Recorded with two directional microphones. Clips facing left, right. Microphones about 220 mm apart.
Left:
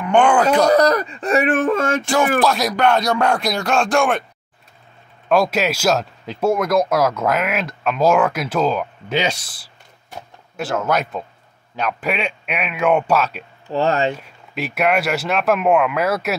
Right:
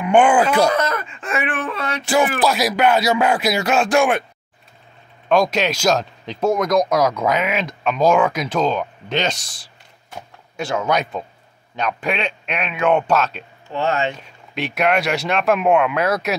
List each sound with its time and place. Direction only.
0.0 s speech: 5° right (ahead or behind)
0.7 s speech: 35° left (ahead or behind)
2.0 s speech: 5° right (ahead or behind)
5.3 s a man's voice: 5° left (ahead or behind)
13.7 s speech: 35° left (ahead or behind)
14.1 s speech: 5° left (ahead or behind)